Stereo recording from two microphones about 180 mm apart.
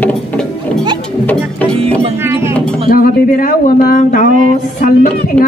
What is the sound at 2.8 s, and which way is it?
Music, 55° left (ahead or behind).